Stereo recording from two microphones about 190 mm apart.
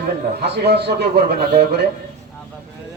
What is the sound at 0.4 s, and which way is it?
A man's voice, 60° right (ahead or behind).